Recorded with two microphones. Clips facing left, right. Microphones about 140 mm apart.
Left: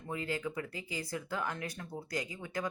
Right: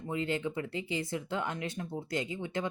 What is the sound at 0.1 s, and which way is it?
Speech, 25° right (ahead or behind).